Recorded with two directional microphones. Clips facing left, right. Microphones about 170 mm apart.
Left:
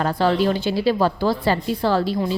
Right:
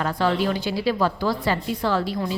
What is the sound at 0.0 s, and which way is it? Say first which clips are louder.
A woman's voice: left 3 dB; 30° left (ahead or behind).